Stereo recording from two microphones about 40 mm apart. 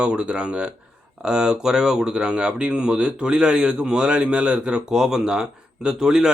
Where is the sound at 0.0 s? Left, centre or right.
Right.